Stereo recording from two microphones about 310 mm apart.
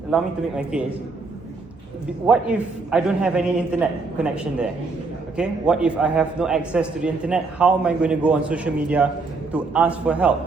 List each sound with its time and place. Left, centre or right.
0.1 s a man's voice: centre
2.2 s a man's voice: centre